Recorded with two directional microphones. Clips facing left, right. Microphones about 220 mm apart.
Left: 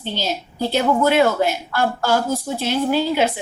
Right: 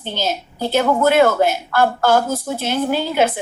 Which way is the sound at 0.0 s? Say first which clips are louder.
Right 2 dB; 50° right (ahead or behind).